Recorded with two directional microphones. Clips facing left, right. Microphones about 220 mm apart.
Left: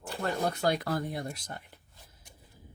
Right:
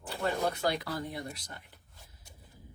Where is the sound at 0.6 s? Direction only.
50° left (ahead or behind).